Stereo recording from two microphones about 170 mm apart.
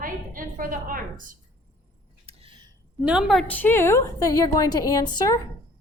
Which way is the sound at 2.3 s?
30° right (ahead or behind).